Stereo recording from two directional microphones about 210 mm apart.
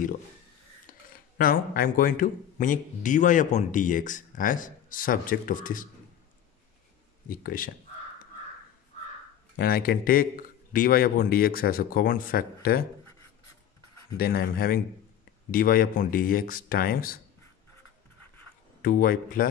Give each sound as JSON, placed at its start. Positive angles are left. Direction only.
{"t": 1.4, "sound": "a man's voice", "side_deg": 45}
{"t": 7.2, "sound": "a man's voice", "side_deg": 40}
{"t": 9.6, "sound": "a man's voice", "side_deg": 45}
{"t": 14.1, "sound": "a man's voice", "side_deg": 45}
{"t": 18.8, "sound": "a man's voice", "side_deg": 45}